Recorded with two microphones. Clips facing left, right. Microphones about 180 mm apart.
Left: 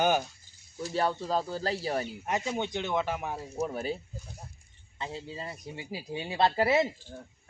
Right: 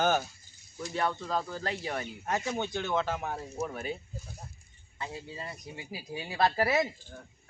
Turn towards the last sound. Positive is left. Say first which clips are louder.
# left 2 dB
turn(degrees=25)  # may be behind; listen again after turning